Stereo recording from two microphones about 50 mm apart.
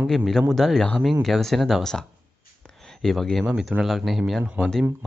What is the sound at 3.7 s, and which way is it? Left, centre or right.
Speech, right.